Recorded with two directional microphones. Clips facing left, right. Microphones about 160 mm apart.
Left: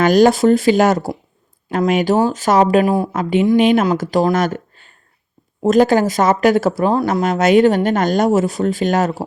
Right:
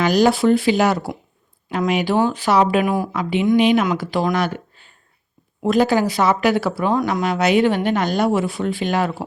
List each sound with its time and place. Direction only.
0.0 s speech: 45° left (ahead or behind); by 3.1 s 30° left (ahead or behind)
3.1 s speech: 45° left (ahead or behind)